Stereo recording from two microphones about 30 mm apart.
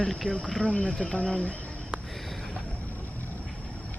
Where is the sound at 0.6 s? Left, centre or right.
Left.